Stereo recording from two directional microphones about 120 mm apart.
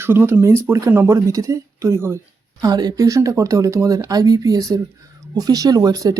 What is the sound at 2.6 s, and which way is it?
Speech, 35° right (ahead or behind).